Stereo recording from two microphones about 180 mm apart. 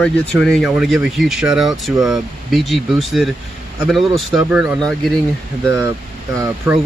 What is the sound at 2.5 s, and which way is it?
Speech, centre (ahead or behind).